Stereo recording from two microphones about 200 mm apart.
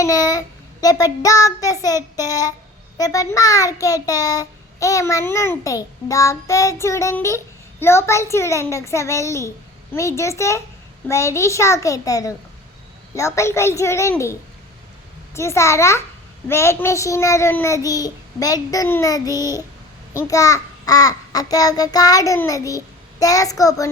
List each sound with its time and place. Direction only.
0.0 s a child's voice: 20° left (ahead or behind)
15.4 s a child's voice: 15° left (ahead or behind)